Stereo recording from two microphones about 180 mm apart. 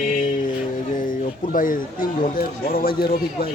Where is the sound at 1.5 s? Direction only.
50° left (ahead or behind).